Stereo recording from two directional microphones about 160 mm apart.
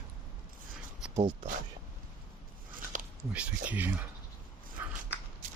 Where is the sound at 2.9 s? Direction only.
55° right (ahead or behind).